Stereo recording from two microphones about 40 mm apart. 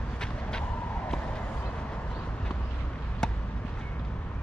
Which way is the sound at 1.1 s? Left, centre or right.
Left.